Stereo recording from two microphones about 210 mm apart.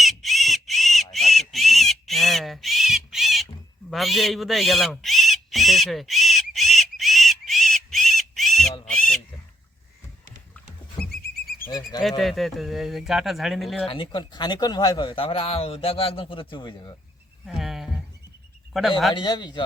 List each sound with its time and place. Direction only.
0.0 s crow: centre (ahead or behind)
1.1 s a sound: centre (ahead or behind)
3.8 s owl: centre (ahead or behind)
8.9 s bird: 5° left (ahead or behind)
11.1 s a sound: 45° left (ahead or behind)
11.6 s frog: 20° left (ahead or behind)
12.0 s speech: centre (ahead or behind)
13.8 s speech: 25° left (ahead or behind)
17.4 s a sound: centre (ahead or behind)
18.7 s speech: centre (ahead or behind)
19.1 s speech: 20° left (ahead or behind)